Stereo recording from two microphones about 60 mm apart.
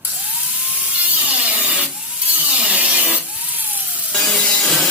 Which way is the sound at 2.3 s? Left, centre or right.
Right.